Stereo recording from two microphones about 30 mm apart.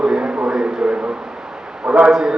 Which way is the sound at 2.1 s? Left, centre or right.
Centre.